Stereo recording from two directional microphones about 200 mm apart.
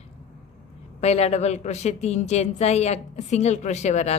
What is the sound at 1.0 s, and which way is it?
A woman's voice, 30° left (ahead or behind).